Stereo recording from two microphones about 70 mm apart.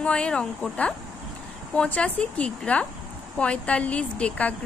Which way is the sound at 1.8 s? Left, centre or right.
Centre.